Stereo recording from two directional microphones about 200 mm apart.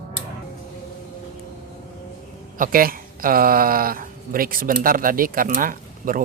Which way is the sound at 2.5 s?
45° right (ahead or behind).